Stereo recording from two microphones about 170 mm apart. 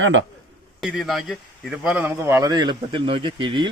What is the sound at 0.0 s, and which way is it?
Speech, 90° right.